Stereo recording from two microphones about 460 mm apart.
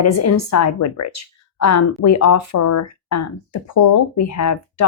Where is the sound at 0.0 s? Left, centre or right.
Left.